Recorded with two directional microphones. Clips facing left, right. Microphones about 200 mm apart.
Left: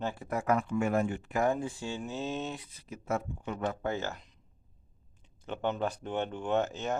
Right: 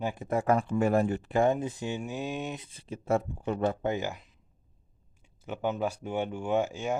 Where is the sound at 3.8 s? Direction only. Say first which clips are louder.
Right 3 dB; 15° right (ahead or behind).